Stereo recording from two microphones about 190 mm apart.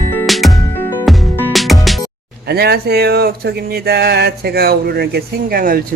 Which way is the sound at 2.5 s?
55° right (ahead or behind).